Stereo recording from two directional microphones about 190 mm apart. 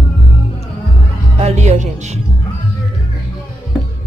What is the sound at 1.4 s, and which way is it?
Music, 35° right (ahead or behind).